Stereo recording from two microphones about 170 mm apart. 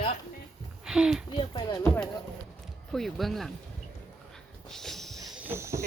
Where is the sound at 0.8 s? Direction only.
5° right (ahead or behind).